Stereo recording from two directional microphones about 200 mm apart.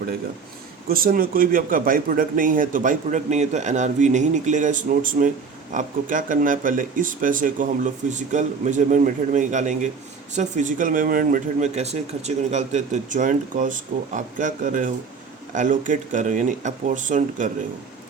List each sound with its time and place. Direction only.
0.9 s speech: 45° right (ahead or behind)